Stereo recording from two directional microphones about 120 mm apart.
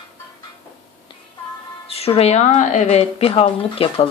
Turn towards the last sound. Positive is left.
turn(degrees=50)  # may be behind; listen again after turning